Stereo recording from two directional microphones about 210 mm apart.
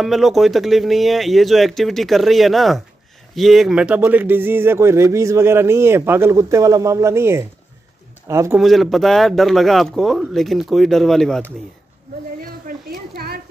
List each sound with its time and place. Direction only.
0.0 s speech: centre (ahead or behind)
8.5 s speech: centre (ahead or behind)
12.4 s a sound: 45° right (ahead or behind)